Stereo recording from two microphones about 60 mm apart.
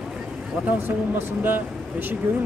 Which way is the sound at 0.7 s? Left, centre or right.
Right.